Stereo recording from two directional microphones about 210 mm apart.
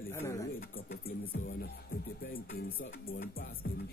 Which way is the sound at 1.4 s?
45° left (ahead or behind).